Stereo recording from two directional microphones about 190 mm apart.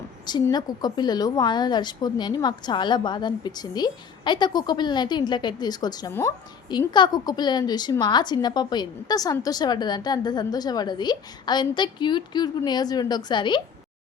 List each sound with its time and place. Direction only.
0.3 s a woman's voice: 20° left (ahead or behind)